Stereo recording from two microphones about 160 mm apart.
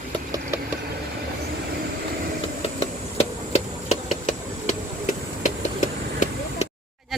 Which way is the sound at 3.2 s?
45° left (ahead or behind).